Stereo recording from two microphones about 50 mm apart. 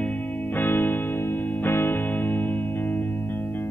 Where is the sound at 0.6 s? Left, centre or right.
Left.